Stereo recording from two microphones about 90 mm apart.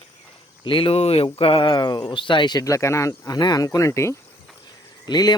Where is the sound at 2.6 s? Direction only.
35° left (ahead or behind).